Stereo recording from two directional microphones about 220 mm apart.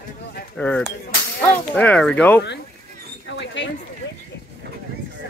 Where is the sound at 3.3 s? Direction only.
55° left (ahead or behind).